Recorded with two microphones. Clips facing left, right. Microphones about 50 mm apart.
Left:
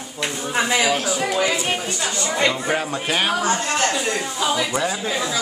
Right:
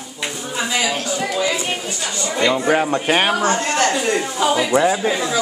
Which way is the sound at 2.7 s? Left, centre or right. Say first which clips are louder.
Right 5 dB; right.